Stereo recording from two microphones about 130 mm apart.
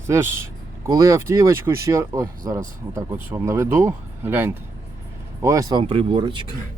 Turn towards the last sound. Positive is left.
turn(degrees=-35)  # may be behind; listen again after turning